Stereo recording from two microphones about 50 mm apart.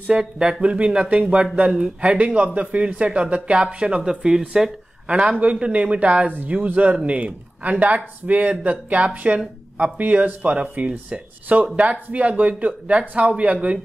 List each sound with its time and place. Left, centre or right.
0.2 s speech: centre
4.0 s speech: centre